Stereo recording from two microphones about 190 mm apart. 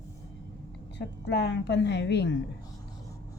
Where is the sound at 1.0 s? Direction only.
65° left (ahead or behind).